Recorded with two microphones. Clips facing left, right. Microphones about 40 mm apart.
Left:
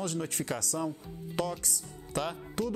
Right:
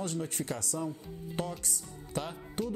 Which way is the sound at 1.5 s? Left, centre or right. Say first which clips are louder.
Left 2 dB; left.